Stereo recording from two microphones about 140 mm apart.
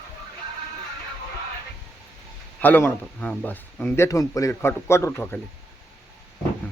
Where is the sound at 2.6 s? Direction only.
15° left (ahead or behind).